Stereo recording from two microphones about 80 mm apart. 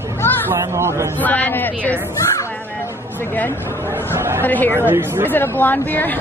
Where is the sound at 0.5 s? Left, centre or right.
Right.